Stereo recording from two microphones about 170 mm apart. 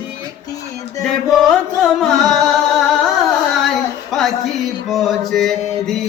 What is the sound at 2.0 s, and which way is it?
Singing, centre (ahead or behind).